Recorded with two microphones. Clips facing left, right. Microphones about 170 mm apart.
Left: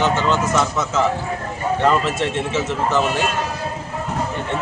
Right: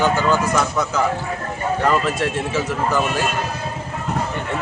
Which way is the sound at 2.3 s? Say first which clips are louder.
Even; 25° left (ahead or behind).